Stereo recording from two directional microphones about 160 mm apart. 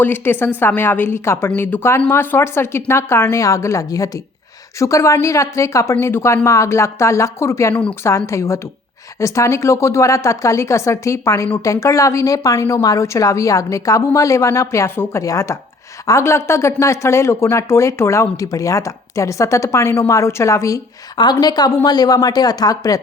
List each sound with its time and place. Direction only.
0.0 s a woman's voice: 15° left (ahead or behind)